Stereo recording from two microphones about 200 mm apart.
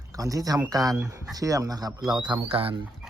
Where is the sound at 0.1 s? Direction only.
15° right (ahead or behind).